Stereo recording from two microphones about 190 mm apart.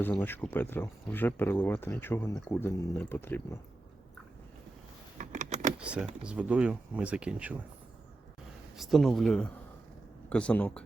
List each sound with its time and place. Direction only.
0.0 s speech: 10° left (ahead or behind)
5.1 s power windows: 40° right (ahead or behind)
5.8 s speech: 5° right (ahead or behind)
8.7 s speech: centre (ahead or behind)